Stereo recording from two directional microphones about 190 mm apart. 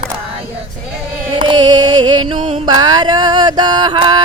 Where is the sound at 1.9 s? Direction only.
90° right.